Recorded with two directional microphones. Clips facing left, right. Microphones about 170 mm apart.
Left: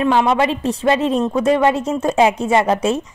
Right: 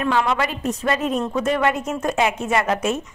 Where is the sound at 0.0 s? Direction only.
25° left (ahead or behind).